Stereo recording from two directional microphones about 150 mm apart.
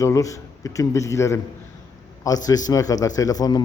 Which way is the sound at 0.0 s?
20° left (ahead or behind).